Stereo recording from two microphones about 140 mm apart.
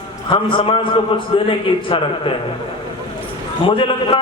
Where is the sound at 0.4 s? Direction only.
35° left (ahead or behind).